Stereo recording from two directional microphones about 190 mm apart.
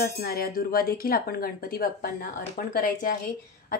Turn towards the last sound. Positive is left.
turn(degrees=50)  # may be behind; listen again after turning